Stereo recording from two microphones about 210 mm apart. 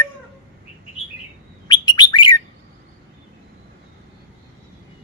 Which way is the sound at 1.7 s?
20° left (ahead or behind).